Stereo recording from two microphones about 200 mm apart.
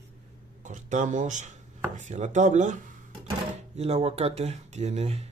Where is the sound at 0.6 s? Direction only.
40° right (ahead or behind).